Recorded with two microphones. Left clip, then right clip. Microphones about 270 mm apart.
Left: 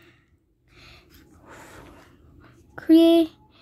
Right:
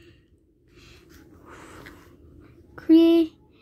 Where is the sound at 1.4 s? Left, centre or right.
Centre.